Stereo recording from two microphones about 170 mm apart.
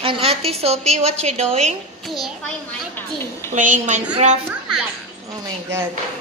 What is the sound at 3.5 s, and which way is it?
Speech, 50° right (ahead or behind).